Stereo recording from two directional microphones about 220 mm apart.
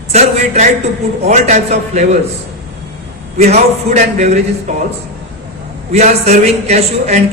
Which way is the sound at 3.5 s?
30° right (ahead or behind).